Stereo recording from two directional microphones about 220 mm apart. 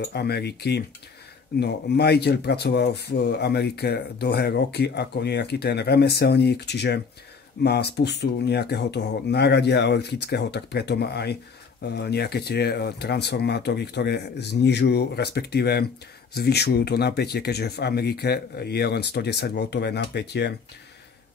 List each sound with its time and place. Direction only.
0.1 s speech: 45° left (ahead or behind)